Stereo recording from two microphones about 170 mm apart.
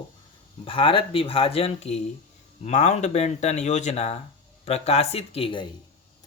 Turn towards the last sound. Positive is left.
turn(degrees=35)  # may be behind; listen again after turning